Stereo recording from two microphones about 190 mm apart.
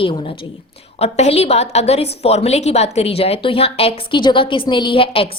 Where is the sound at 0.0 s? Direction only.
25° left (ahead or behind).